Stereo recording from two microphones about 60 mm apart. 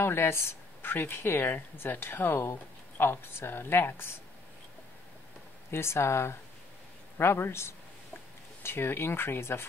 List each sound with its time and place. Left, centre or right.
0.0 s speech: left
5.7 s speech: left